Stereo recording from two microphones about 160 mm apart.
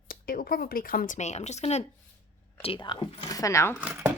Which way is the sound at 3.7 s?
10° right (ahead or behind).